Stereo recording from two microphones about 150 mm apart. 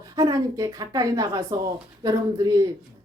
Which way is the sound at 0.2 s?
25° right (ahead or behind).